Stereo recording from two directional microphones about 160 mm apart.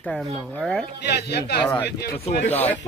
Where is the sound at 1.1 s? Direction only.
90° left.